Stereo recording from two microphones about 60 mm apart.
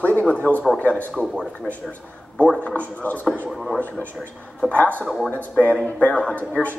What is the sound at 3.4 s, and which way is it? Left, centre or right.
Speech, centre.